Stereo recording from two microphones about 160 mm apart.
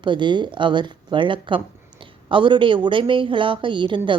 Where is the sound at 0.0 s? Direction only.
30° right (ahead or behind).